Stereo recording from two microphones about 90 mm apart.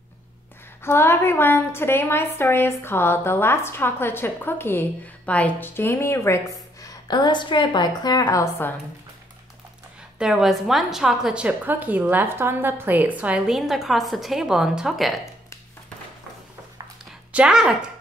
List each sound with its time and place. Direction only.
0.8 s a woman's voice: 25° left (ahead or behind)
6.8 s a woman's voice: 45° left (ahead or behind)
10.1 s a woman's voice: 10° right (ahead or behind)
13.5 s a woman's voice: 5° right (ahead or behind)
17.3 s speech: 10° right (ahead or behind)